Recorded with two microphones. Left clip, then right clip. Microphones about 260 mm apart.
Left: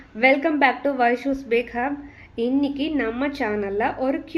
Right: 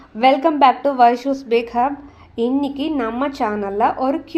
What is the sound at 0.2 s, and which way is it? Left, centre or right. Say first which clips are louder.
A woman's voice: right 4 dB; right.